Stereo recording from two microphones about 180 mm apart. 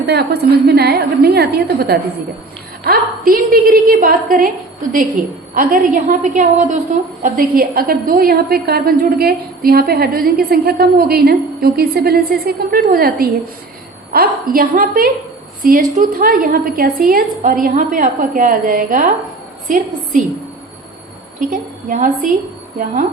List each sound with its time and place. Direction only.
0.0 s a woman's voice: 65° right (ahead or behind); by 20.2 s 45° right (ahead or behind)
21.5 s a woman's voice: 45° right (ahead or behind)